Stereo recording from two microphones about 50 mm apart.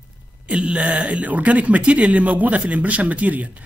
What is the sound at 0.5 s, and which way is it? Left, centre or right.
A man's voice, right.